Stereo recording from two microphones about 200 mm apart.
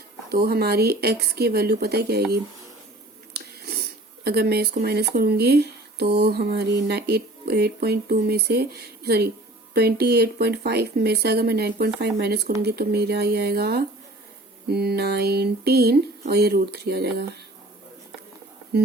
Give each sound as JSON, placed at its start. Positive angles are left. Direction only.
{"t": 0.3, "sound": "speech", "side_deg": -50}